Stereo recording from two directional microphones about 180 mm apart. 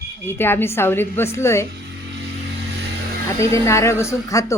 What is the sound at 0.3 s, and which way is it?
Speech, 10° left (ahead or behind).